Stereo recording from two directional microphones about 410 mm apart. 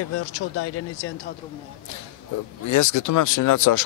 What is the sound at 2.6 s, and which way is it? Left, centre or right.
Speech, left.